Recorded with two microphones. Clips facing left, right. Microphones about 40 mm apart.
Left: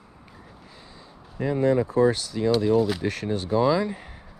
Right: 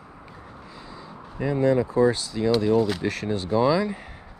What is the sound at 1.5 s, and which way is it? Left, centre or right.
Speech, right.